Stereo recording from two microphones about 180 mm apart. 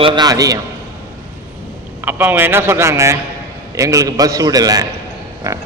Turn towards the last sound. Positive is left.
turn(degrees=-15)  # may be behind; listen again after turning